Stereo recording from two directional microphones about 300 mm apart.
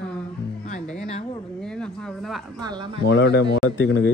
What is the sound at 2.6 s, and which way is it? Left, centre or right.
Speech, centre.